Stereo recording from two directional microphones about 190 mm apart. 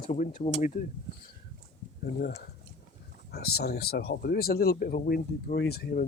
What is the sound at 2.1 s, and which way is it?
Speech, 55° left (ahead or behind).